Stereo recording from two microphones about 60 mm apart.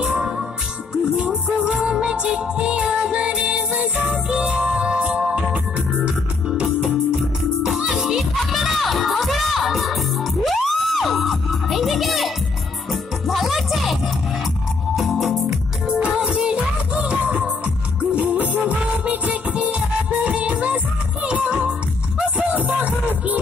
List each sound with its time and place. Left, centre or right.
0.0 s music: centre